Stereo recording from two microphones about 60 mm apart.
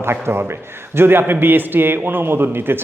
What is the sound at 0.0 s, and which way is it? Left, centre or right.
A man's voice, right.